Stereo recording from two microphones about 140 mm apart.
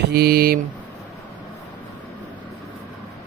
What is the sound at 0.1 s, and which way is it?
Mantra, 90° right.